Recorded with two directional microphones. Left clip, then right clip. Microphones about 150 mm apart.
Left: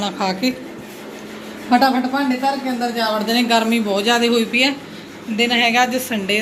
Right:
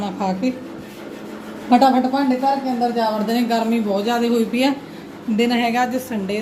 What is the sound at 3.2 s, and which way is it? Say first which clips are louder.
Speech: left 3 dB; 20° right (ahead or behind).